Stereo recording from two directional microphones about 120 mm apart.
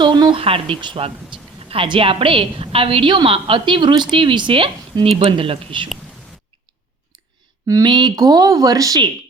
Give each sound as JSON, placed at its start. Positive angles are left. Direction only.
{"t": 0.0, "sound": "a woman's voice", "side_deg": -40}
{"t": 7.7, "sound": "speech", "side_deg": -35}